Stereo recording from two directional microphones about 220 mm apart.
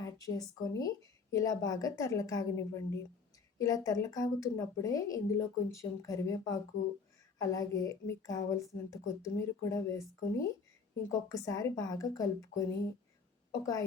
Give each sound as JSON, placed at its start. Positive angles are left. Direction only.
{"t": 0.3, "sound": "a woman's voice", "side_deg": 15}